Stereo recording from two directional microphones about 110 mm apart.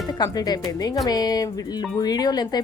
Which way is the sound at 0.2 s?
35° left (ahead or behind).